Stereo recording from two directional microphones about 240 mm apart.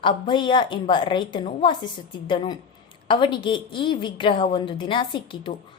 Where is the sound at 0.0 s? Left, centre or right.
Centre.